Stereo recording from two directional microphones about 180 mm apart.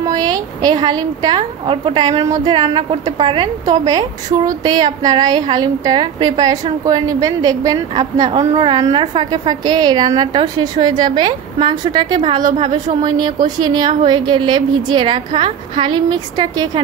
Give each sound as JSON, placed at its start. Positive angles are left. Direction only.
{"t": 0.0, "sound": "a woman's voice", "side_deg": -20}